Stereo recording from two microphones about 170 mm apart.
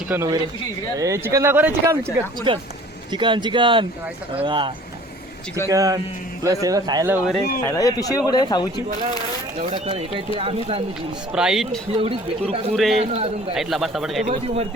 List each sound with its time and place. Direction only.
0.1 s speech: 15° right (ahead or behind)
2.5 s speech: 30° right (ahead or behind)
7.1 s speech: centre (ahead or behind)
7.6 s speech: 20° left (ahead or behind)
9.7 s speech: 35° right (ahead or behind)
11.3 s speech: 5° right (ahead or behind)
11.9 s speech: 35° right (ahead or behind)
12.7 s speech: centre (ahead or behind)
13.0 s speech: 35° right (ahead or behind)
13.5 s speech: centre (ahead or behind)
14.3 s speech: 35° right (ahead or behind)